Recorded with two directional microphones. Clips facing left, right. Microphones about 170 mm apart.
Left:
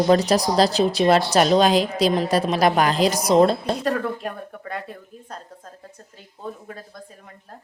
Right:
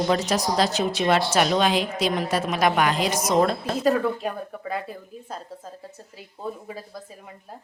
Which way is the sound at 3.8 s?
Centre (ahead or behind).